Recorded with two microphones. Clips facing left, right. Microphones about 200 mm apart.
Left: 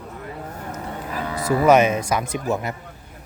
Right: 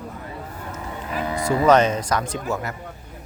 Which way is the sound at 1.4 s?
10° left (ahead or behind).